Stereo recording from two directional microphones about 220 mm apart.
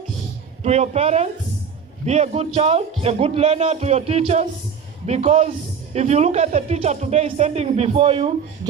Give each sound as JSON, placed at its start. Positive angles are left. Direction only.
{"t": 0.6, "sound": "speech", "side_deg": -30}